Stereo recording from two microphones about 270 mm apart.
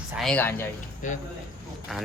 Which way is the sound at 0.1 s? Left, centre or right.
Centre.